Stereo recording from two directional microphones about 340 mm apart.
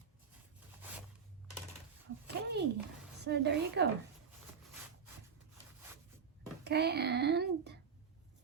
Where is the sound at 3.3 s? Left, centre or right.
Right.